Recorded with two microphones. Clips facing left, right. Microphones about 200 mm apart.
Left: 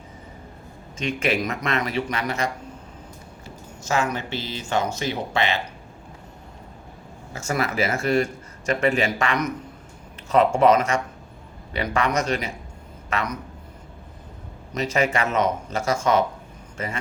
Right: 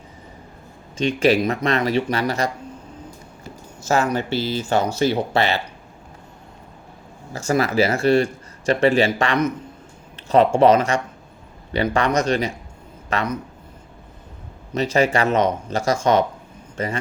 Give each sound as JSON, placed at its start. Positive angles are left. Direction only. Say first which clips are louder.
{"t": 0.9, "sound": "speech", "louder": "right 7 dB", "side_deg": -30}
{"t": 3.8, "sound": "speech", "louder": "right 5 dB", "side_deg": -40}
{"t": 7.3, "sound": "speech", "louder": "right 6 dB", "side_deg": -30}
{"t": 14.7, "sound": "a man's voice", "louder": "right 4 dB", "side_deg": -30}